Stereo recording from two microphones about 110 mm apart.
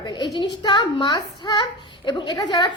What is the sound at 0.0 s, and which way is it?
A woman's voice, 45° left (ahead or behind).